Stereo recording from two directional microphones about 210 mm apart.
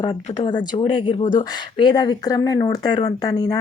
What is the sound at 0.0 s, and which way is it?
A woman's voice, 20° left (ahead or behind).